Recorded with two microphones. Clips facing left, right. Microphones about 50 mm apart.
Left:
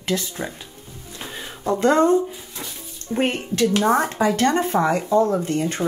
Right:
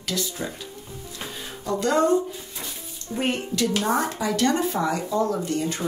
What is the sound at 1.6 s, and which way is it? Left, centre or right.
Speech, left.